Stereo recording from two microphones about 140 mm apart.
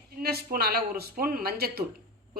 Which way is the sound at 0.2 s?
90° right.